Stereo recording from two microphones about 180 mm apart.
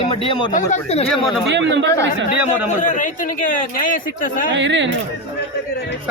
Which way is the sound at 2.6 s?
45° left (ahead or behind).